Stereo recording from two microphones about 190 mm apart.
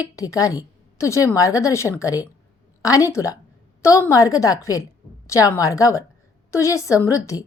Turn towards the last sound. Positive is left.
turn(degrees=15)  # may be behind; listen again after turning